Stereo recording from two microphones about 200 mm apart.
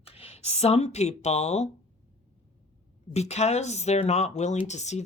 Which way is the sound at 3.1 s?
35° left (ahead or behind).